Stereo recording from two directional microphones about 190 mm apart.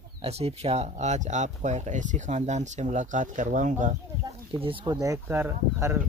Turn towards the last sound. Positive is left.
turn(degrees=-15)  # may be behind; listen again after turning